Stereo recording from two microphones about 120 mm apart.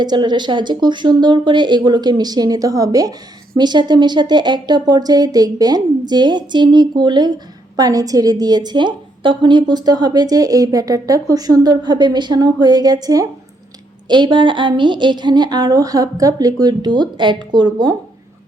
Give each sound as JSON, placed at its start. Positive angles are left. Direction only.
{"t": 0.0, "sound": "a woman's voice", "side_deg": -35}